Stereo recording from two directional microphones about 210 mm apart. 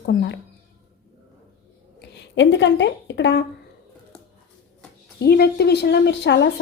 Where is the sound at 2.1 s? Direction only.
60° left (ahead or behind).